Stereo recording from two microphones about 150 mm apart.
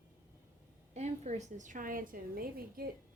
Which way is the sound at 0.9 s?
45° right (ahead or behind).